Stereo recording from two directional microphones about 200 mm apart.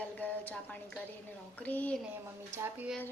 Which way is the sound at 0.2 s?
10° left (ahead or behind).